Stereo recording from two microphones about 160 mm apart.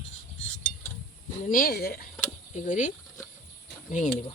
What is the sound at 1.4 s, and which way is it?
Speech, 65° left (ahead or behind).